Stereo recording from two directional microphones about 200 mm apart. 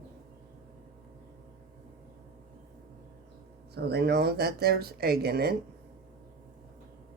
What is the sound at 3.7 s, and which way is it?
Speech, 55° right (ahead or behind).